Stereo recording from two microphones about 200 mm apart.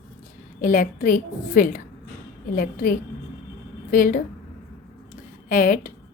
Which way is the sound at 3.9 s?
45° left (ahead or behind).